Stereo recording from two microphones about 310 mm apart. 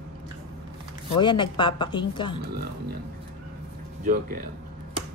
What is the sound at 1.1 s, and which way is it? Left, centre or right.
Speech, centre.